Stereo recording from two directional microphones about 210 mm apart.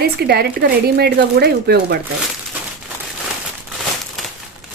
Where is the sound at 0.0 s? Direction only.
50° right (ahead or behind).